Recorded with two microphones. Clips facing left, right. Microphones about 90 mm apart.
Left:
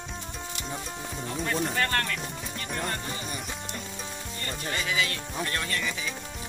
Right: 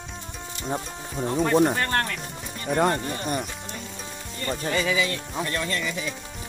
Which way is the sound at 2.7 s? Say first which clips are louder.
Right 11 dB; 55° right (ahead or behind).